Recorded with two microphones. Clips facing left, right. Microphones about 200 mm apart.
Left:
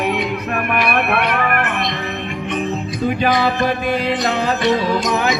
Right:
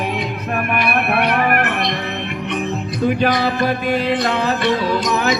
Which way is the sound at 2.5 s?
50° right (ahead or behind).